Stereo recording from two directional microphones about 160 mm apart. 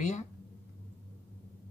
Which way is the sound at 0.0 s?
45° left (ahead or behind).